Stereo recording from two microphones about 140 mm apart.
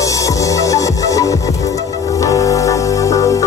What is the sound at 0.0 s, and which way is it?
Music, 25° left (ahead or behind).